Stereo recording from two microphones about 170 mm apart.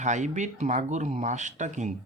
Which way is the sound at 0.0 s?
45° right (ahead or behind).